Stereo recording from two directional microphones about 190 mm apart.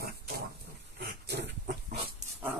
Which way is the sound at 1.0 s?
60° right (ahead or behind).